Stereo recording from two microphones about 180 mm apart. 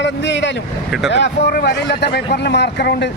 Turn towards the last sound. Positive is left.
turn(degrees=70)  # may be behind; listen again after turning